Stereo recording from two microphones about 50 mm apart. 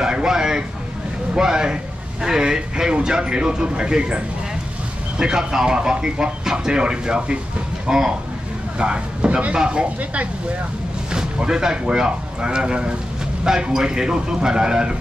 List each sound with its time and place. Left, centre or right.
0.0 s a sound: centre
1.3 s speech: centre
5.2 s speech: centre